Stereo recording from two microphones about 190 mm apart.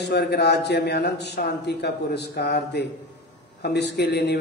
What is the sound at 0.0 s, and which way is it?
A man's voice, 60° left (ahead or behind).